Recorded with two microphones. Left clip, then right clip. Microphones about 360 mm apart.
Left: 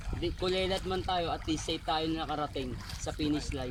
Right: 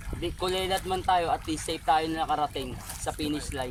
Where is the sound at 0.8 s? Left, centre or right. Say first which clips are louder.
Right 7 dB; right.